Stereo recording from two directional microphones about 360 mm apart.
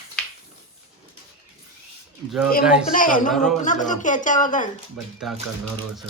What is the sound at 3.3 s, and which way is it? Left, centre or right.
Speech, centre.